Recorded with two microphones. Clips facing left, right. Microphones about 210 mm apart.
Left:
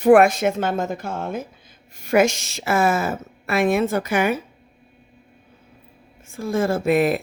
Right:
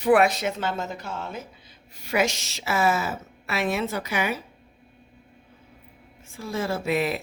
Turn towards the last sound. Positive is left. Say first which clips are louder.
# left 7 dB
turn(degrees=50)  # may be behind; listen again after turning